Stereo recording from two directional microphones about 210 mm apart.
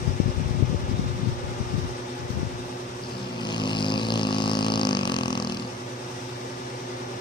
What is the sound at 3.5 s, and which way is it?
Vehicle, 20° left (ahead or behind).